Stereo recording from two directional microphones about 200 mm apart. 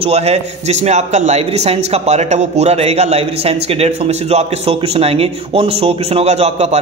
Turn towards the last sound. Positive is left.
turn(degrees=-35)  # may be behind; listen again after turning